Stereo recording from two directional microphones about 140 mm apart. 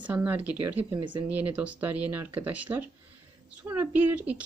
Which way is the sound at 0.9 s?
35° right (ahead or behind).